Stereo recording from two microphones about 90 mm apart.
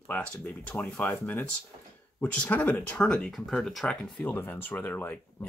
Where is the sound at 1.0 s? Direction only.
25° left (ahead or behind).